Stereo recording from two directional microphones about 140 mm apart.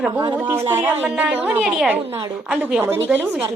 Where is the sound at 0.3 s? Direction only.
15° right (ahead or behind).